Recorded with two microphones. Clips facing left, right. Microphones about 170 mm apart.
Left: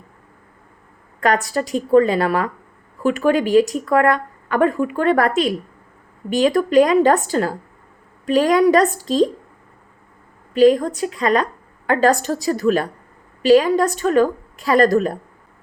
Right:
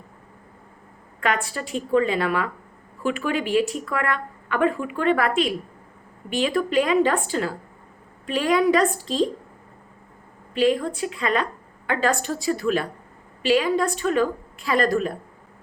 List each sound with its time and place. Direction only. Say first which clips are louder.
1.2 s a woman's voice: left 6 dB; 40° left (ahead or behind)
10.5 s a woman's voice: left 7 dB; 40° left (ahead or behind)